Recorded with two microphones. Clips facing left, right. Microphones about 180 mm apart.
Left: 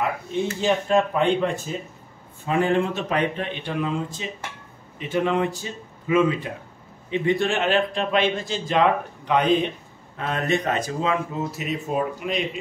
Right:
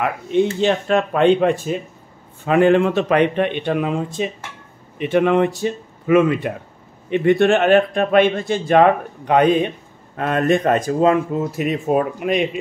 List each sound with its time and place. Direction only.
0.0 s a man's voice: 70° right (ahead or behind)